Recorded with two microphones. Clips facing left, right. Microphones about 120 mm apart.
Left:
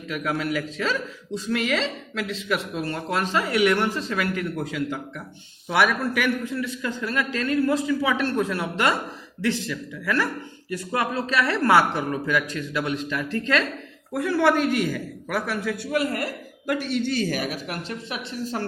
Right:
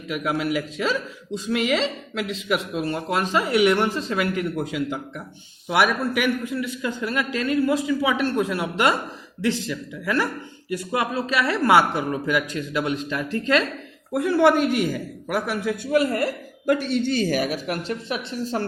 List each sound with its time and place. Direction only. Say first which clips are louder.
0.1 s a man's voice: right 2 dB; 15° right (ahead or behind)
15.9 s speech: right 6 dB; 30° right (ahead or behind)
17.8 s a woman's voice: right 4 dB; 30° right (ahead or behind)